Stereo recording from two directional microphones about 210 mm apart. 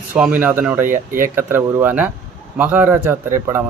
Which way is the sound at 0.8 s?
40° right (ahead or behind).